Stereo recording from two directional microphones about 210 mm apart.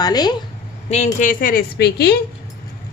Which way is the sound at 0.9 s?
30° left (ahead or behind).